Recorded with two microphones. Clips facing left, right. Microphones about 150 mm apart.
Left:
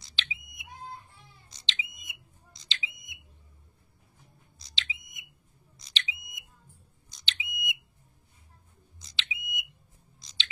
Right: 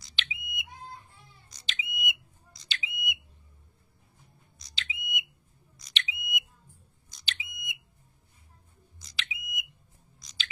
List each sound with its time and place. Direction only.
0.2 s smoke detector: 30° left (ahead or behind)
4.6 s a sound: 30° left (ahead or behind)
5.8 s smoke detector: 30° left (ahead or behind)
7.2 s smoke detector: 20° left (ahead or behind)
9.0 s smoke detector: 25° left (ahead or behind)
10.1 s chewing: 25° left (ahead or behind)